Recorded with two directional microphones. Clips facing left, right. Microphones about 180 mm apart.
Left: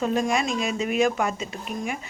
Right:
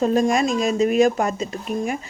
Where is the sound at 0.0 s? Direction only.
40° right (ahead or behind).